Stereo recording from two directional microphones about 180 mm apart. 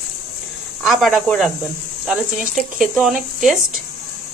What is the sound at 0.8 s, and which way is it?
Speech, centre (ahead or behind).